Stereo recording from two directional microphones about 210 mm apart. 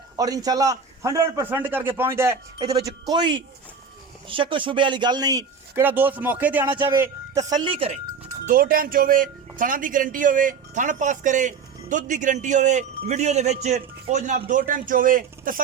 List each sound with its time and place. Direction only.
0.2 s a man's voice: 15° right (ahead or behind)
8.4 s a man's voice: 45° right (ahead or behind)